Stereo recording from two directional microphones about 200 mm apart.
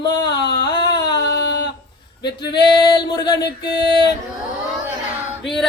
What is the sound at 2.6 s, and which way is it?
Female singing, 25° left (ahead or behind).